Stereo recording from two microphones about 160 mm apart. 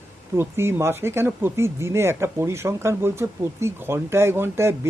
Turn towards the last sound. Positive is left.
turn(degrees=-15)  # may be behind; listen again after turning